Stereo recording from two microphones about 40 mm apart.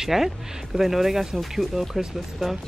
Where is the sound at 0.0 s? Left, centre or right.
Centre.